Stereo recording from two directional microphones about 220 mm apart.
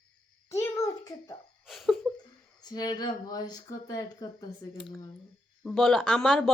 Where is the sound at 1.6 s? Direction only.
Centre (ahead or behind).